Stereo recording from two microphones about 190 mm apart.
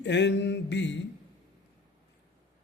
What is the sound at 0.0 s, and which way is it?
Speech, 65° left (ahead or behind).